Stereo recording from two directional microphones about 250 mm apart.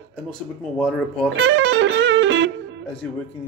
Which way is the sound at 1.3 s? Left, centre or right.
Right.